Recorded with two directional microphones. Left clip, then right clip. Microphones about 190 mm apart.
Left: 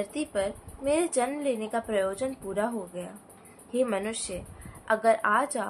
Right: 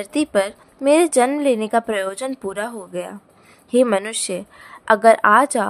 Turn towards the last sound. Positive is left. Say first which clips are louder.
# right 11 dB
turn(degrees=-50)  # may be behind; listen again after turning